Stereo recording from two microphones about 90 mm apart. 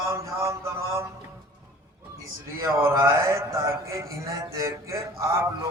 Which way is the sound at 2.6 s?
35° right (ahead or behind).